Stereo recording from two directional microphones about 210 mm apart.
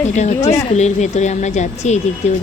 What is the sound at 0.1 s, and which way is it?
Speech, 35° left (ahead or behind).